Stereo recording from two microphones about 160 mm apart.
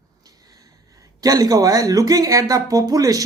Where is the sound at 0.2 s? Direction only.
25° right (ahead or behind).